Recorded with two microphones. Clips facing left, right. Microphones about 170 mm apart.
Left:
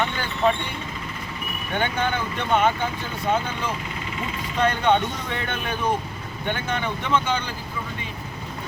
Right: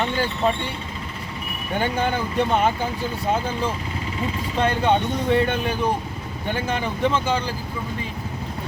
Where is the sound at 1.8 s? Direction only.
35° right (ahead or behind).